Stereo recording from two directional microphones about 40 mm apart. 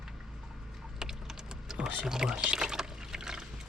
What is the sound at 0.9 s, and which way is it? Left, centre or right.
Typing, centre.